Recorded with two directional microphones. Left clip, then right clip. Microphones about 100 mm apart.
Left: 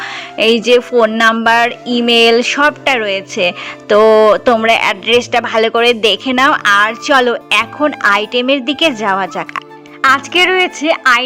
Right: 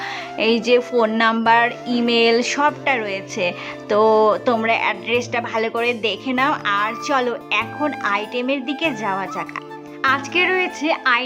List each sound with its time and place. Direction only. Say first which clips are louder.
0.3 s speech: left 7 dB; 30° left (ahead or behind)
1.2 s a sound: left 3 dB; 40° left (ahead or behind)
10.0 s speech: left 8 dB; 45° left (ahead or behind)